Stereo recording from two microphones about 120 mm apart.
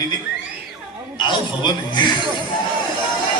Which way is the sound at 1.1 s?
40° left (ahead or behind).